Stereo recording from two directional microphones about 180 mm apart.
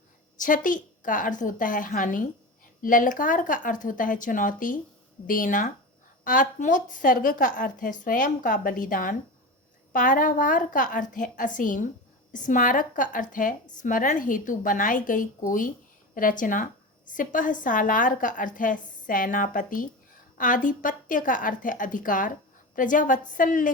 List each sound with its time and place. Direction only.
0.3 s a woman's voice: 45° left (ahead or behind)